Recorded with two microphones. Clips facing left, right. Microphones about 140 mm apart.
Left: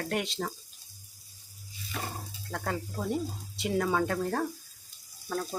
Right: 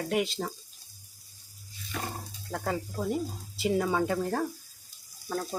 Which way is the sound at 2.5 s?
5° right (ahead or behind).